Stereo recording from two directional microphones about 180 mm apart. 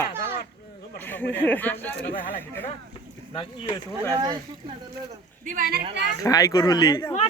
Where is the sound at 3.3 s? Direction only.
25° left (ahead or behind).